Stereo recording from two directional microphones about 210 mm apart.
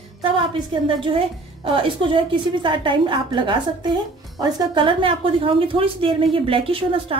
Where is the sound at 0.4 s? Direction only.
25° right (ahead or behind).